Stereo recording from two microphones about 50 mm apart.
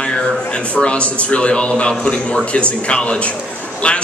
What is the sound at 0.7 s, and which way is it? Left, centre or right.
A man's voice, left.